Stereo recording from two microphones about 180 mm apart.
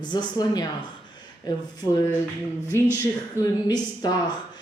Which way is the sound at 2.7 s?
15° left (ahead or behind).